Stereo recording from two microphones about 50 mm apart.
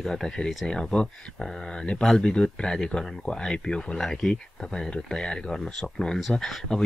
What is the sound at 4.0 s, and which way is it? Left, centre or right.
Speech, centre.